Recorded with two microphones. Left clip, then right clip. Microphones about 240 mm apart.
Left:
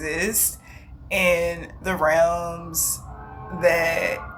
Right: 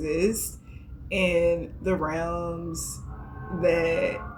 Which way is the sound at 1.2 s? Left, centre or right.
Centre.